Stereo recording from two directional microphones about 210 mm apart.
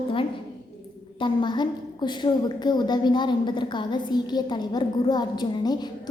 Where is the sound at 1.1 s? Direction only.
20° left (ahead or behind).